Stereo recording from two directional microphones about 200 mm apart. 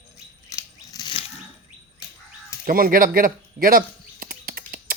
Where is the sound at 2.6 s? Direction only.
45° right (ahead or behind).